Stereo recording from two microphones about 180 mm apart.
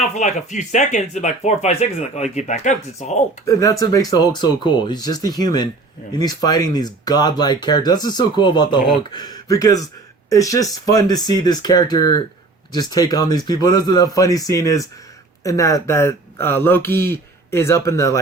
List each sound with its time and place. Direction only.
0.1 s speech: 40° left (ahead or behind)
3.4 s speech: 20° left (ahead or behind)